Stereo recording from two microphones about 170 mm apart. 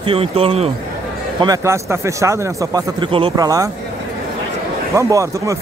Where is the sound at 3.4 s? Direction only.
20° right (ahead or behind).